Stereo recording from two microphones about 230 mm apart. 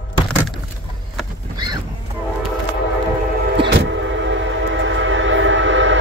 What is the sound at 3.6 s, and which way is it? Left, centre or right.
Train, right.